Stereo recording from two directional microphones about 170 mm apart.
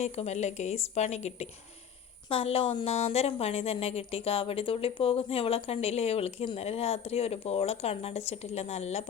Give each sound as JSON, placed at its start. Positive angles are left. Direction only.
{"t": 0.0, "sound": "a woman's voice", "side_deg": 40}